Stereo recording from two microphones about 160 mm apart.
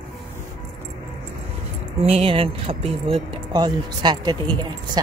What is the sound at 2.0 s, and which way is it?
Speech, 35° right (ahead or behind).